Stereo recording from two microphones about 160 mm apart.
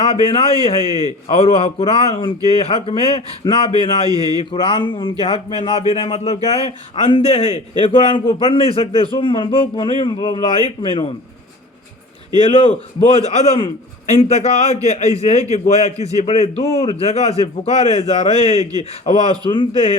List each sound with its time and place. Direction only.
0.0 s a man's voice: 35° left (ahead or behind)
4.1 s speech: 25° right (ahead or behind)
4.4 s a man's voice: 35° left (ahead or behind)
12.4 s a man's voice: 35° left (ahead or behind)
18.6 s speech: 25° right (ahead or behind)
19.5 s a man's voice: 30° left (ahead or behind)